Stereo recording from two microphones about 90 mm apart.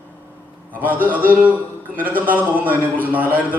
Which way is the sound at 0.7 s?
20° right (ahead or behind).